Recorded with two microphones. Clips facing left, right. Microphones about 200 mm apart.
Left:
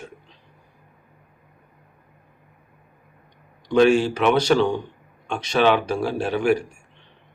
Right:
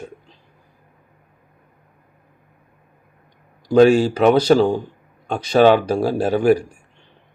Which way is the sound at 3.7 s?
40° right (ahead or behind).